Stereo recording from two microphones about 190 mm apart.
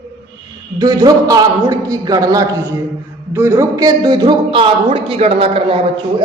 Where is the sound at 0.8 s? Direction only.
20° right (ahead or behind).